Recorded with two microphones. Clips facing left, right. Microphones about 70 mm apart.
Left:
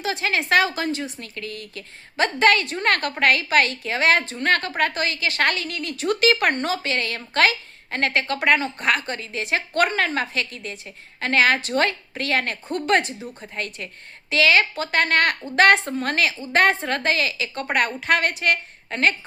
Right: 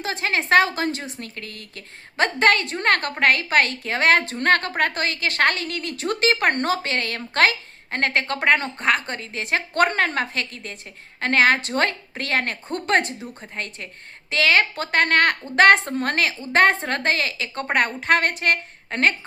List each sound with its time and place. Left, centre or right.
0.0 s a woman's voice: right
13.1 s a woman's voice: centre
13.6 s a woman's voice: right